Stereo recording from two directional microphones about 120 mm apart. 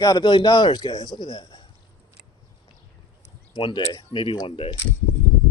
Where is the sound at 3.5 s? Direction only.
40° left (ahead or behind).